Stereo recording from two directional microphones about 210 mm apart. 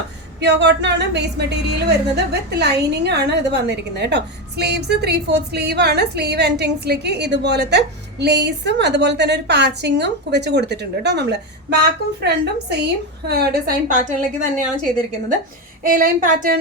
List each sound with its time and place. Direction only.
0.3 s a woman's voice: 55° right (ahead or behind)
15.8 s a woman's voice: 40° right (ahead or behind)